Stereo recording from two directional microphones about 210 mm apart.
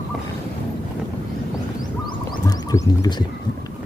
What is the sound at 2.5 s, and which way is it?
Speech, 20° left (ahead or behind).